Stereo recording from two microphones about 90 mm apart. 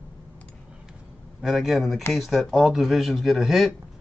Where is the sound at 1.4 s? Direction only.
Centre (ahead or behind).